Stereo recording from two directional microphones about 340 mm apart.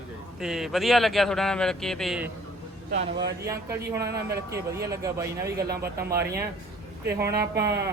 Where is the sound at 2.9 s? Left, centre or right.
Right.